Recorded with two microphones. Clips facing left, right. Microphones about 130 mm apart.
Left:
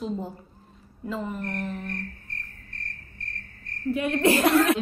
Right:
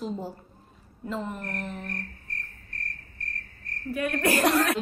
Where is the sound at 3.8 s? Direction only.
25° left (ahead or behind).